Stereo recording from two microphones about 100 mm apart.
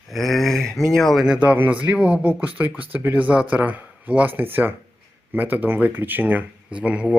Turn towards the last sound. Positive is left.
turn(degrees=-10)  # may be behind; listen again after turning